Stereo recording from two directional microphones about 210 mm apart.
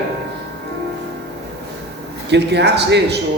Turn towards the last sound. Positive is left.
turn(degrees=-55)  # may be behind; listen again after turning